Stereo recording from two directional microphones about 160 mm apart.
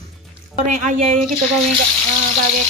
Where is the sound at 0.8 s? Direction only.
50° right (ahead or behind).